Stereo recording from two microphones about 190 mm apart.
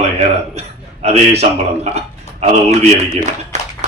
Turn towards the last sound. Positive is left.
turn(degrees=-35)  # may be behind; listen again after turning